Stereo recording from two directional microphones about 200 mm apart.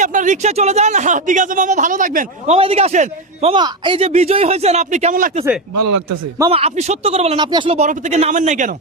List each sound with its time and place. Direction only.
0.0 s a man's voice: 40° right (ahead or behind)
2.6 s a man's voice: 30° right (ahead or behind)
6.5 s a man's voice: 30° right (ahead or behind)